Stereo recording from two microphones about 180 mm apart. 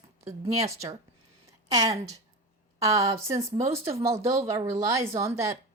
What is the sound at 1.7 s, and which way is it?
A woman's voice, 20° right (ahead or behind).